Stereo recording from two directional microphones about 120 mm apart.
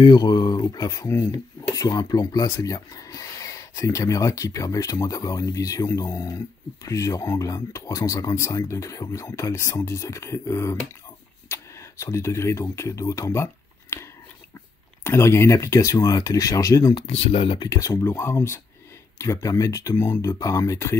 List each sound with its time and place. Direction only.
0.0 s speech: 35° left (ahead or behind)
15.0 s speech: 20° left (ahead or behind)
17.0 s speech: 50° left (ahead or behind)
17.6 s speech: 30° left (ahead or behind)